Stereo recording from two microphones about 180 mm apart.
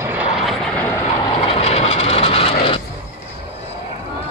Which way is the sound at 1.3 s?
35° left (ahead or behind).